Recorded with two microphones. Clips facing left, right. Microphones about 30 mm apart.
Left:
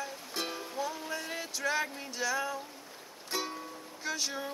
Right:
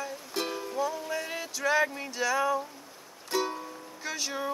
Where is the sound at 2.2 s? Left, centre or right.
Centre.